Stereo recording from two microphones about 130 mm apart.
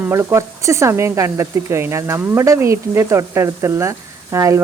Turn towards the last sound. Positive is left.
turn(degrees=-25)  # may be behind; listen again after turning